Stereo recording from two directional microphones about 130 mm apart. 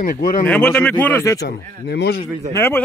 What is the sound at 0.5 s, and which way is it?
Speech, 10° left (ahead or behind).